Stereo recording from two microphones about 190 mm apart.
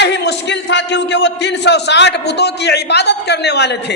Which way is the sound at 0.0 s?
65° left (ahead or behind).